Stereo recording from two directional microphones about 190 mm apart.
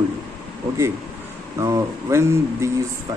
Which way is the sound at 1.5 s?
15° right (ahead or behind).